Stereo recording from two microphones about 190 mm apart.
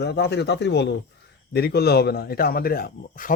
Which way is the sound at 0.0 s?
60° left (ahead or behind).